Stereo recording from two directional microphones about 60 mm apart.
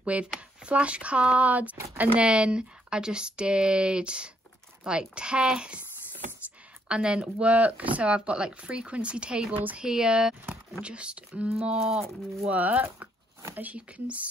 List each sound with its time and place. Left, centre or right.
0.0 s speech: right
6.9 s speech: centre
9.5 s speech: right
9.8 s speech: centre
11.6 s speech: centre
12.5 s speech: right